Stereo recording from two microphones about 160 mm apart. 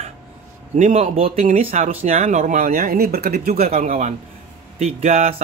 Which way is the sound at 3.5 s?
40° right (ahead or behind).